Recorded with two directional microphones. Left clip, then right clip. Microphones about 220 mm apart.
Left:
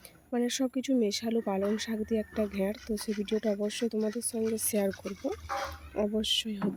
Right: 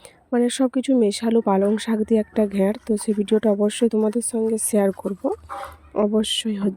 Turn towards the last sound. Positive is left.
turn(degrees=-35)  # may be behind; listen again after turning